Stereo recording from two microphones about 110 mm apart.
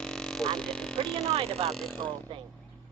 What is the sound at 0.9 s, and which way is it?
Speech, 65° right (ahead or behind).